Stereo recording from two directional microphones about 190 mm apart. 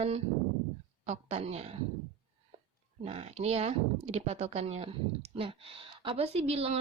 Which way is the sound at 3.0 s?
30° right (ahead or behind).